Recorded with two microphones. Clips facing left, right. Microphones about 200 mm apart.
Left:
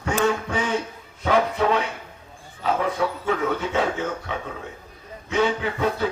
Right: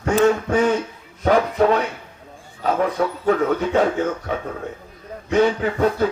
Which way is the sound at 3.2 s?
50° right (ahead or behind).